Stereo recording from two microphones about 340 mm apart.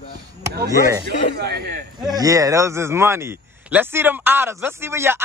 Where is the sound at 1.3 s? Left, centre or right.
Right.